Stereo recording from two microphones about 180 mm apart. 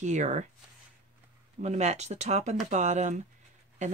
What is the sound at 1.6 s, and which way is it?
Speech, 40° right (ahead or behind).